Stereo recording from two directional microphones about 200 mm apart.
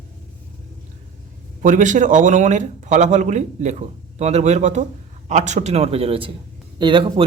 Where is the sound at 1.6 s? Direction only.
40° right (ahead or behind).